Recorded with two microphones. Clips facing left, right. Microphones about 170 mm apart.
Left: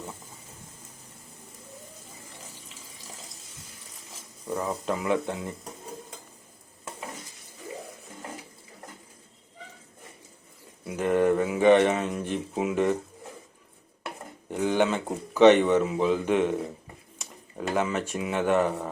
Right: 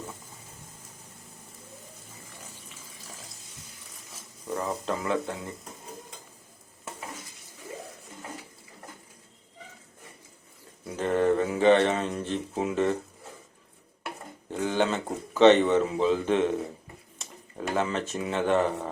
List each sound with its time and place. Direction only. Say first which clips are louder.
4.4 s speech: left 1 dB; centre (ahead or behind)
4.9 s speech: left 3 dB; 15° left (ahead or behind)
10.8 s speech: left 1 dB; 10° left (ahead or behind)
14.5 s speech: left 2 dB; 15° left (ahead or behind)